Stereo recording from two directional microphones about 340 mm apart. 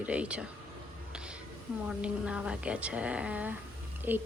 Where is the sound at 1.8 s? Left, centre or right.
Centre.